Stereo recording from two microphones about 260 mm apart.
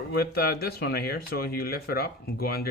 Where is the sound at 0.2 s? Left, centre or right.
Left.